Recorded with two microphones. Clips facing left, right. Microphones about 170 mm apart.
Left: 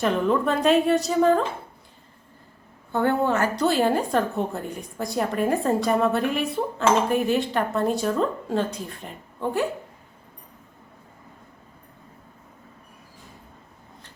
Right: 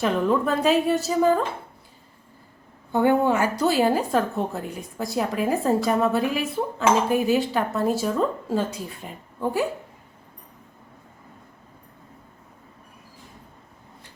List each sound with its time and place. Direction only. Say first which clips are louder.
0.0 s a woman's voice: even; centre (ahead or behind)
2.9 s a woman's voice: right 2 dB; 15° right (ahead or behind)